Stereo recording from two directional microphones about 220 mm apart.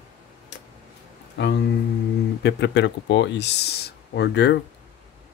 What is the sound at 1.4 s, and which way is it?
Speech, 50° left (ahead or behind).